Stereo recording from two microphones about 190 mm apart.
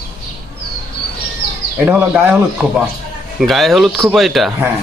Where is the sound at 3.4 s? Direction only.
Centre (ahead or behind).